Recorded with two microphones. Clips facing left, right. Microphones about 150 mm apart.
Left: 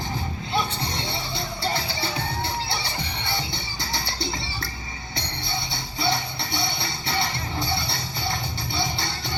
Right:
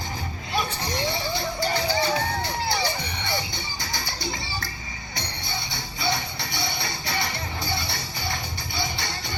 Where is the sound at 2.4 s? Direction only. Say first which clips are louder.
Right 3 dB; 25° left (ahead or behind).